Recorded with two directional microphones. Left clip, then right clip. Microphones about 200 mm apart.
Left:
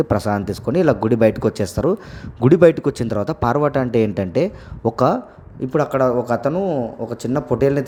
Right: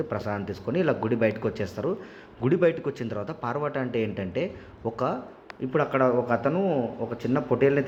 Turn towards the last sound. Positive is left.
turn(degrees=40)  # may be behind; listen again after turning